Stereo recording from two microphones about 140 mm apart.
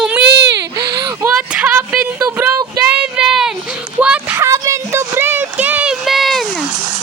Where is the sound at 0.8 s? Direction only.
30° right (ahead or behind).